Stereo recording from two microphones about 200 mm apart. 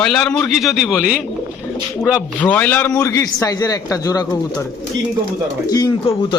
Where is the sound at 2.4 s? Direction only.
5° left (ahead or behind).